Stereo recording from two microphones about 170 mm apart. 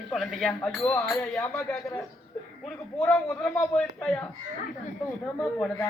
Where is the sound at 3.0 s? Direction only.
5° left (ahead or behind).